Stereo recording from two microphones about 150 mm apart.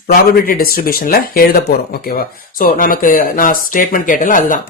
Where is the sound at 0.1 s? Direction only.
80° left.